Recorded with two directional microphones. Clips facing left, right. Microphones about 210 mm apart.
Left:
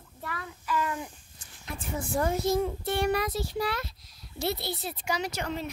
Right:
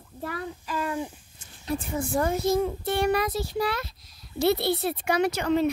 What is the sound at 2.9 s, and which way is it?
Child singing, 80° right.